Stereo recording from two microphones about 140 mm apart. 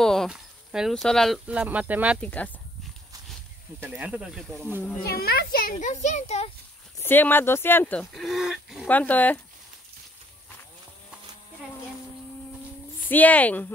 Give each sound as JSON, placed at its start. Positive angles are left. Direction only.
{"t": 0.0, "sound": "cricket", "side_deg": 0}
{"t": 1.5, "sound": "speech", "side_deg": -10}
{"t": 2.2, "sound": "speech", "side_deg": 10}
{"t": 3.8, "sound": "speech", "side_deg": -10}
{"t": 5.0, "sound": "speech", "side_deg": 90}
{"t": 7.0, "sound": "speech", "side_deg": 15}
{"t": 8.1, "sound": "speech", "side_deg": 0}
{"t": 8.8, "sound": "speech", "side_deg": 10}
{"t": 13.1, "sound": "speech", "side_deg": 10}